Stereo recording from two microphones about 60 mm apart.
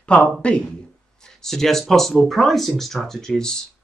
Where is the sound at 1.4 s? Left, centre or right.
Centre.